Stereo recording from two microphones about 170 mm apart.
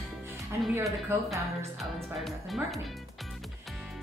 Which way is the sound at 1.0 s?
15° right (ahead or behind).